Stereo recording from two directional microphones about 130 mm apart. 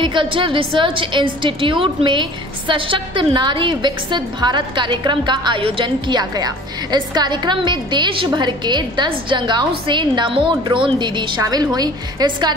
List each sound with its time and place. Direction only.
0.0 s a woman's voice: 40° right (ahead or behind)